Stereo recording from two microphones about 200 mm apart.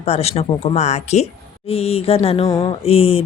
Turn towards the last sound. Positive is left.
turn(degrees=30)  # may be behind; listen again after turning